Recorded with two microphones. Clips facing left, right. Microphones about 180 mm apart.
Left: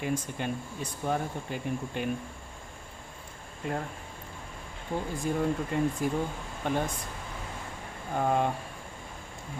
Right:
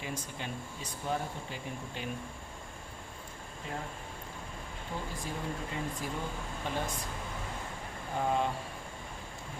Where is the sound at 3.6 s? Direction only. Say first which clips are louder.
Left 8 dB; 55° left (ahead or behind).